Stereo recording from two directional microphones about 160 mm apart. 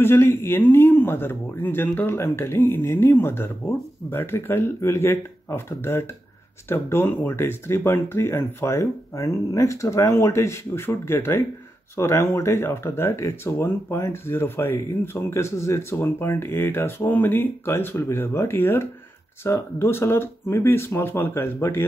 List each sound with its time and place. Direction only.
0.0 s speech: 15° left (ahead or behind)